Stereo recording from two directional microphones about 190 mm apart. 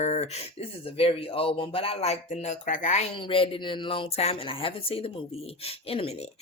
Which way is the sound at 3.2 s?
25° left (ahead or behind).